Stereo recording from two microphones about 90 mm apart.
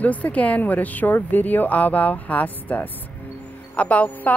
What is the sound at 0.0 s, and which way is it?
A woman's voice, 15° left (ahead or behind).